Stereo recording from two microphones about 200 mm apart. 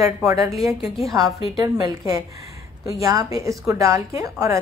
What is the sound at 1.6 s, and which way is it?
A woman's voice, 20° right (ahead or behind).